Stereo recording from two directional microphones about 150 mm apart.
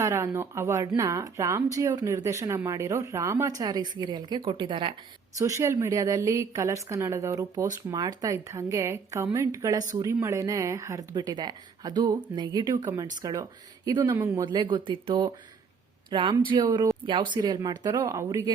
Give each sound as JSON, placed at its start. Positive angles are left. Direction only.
{"t": 0.0, "sound": "a woman's voice", "side_deg": -20}
{"t": 5.4, "sound": "a woman's voice", "side_deg": -20}